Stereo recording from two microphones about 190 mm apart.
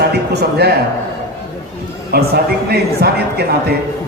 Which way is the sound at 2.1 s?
55° right (ahead or behind).